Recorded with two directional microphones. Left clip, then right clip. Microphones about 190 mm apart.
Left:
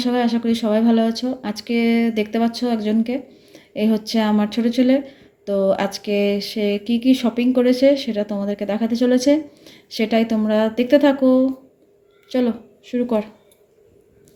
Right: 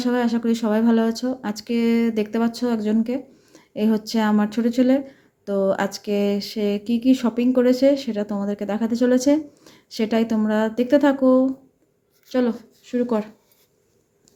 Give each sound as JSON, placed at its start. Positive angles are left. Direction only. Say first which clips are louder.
{"t": 0.0, "sound": "speech", "louder": "left 2 dB", "side_deg": 0}